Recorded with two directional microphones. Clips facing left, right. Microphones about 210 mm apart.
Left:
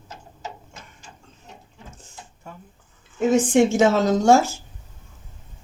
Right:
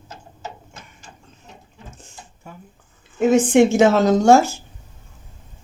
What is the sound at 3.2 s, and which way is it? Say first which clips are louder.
A woman's voice: right 3 dB; 65° right (ahead or behind).